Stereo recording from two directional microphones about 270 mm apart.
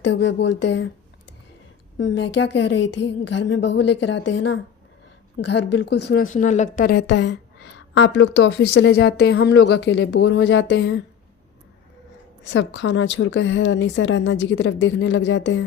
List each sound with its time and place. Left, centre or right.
0.0 s a woman's voice: left
2.0 s a woman's voice: left
12.5 s speech: left